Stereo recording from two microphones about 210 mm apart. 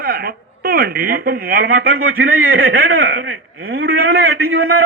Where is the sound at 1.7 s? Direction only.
80° right.